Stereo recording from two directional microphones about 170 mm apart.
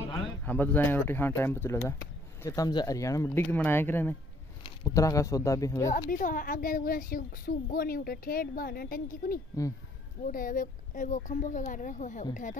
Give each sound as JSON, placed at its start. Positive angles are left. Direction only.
{"t": 0.5, "sound": "speech", "side_deg": 10}
{"t": 5.9, "sound": "speech", "side_deg": 50}